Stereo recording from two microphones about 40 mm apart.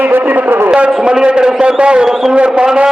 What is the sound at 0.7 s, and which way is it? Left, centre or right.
A man's voice, right.